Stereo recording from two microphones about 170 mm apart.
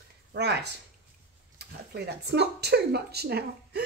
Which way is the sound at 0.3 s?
80° right.